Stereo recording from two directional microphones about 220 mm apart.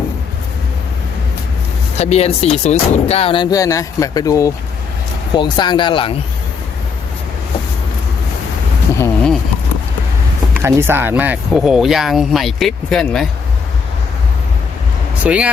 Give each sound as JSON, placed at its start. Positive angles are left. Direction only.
{"t": 2.0, "sound": "speech", "side_deg": 30}
{"t": 9.0, "sound": "a sound", "side_deg": 5}
{"t": 10.6, "sound": "speech", "side_deg": -10}
{"t": 15.2, "sound": "speech", "side_deg": -5}